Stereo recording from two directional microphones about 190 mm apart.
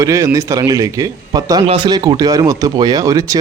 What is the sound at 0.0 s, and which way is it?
A man's voice, 15° right (ahead or behind).